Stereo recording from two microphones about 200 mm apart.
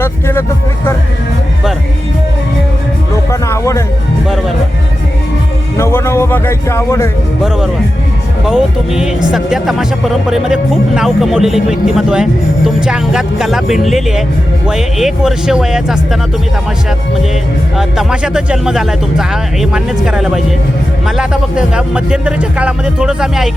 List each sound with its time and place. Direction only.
0.0 s speech: 10° left (ahead or behind)
3.4 s music: 15° left (ahead or behind)
5.7 s speech: 10° left (ahead or behind)
8.4 s speech: 5° right (ahead or behind)
17.7 s speech: 5° right (ahead or behind)